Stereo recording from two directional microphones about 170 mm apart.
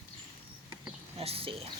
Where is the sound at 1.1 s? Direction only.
35° right (ahead or behind).